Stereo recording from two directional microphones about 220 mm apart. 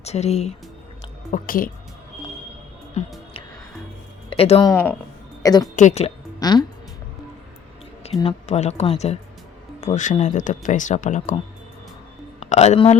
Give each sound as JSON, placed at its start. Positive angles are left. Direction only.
{"t": 0.0, "sound": "speech", "side_deg": 30}
{"t": 3.0, "sound": "speech", "side_deg": 30}
{"t": 4.3, "sound": "speech", "side_deg": 25}
{"t": 4.7, "sound": "speech", "side_deg": 10}
{"t": 5.4, "sound": "music", "side_deg": 15}
{"t": 5.7, "sound": "speech", "side_deg": 30}
{"t": 6.4, "sound": "speech", "side_deg": 20}
{"t": 8.2, "sound": "speech", "side_deg": 25}
{"t": 12.4, "sound": "a man's voice", "side_deg": 30}